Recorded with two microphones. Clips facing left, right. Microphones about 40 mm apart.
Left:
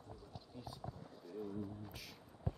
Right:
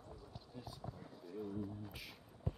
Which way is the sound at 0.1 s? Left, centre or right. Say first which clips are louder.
Left 1 dB; centre.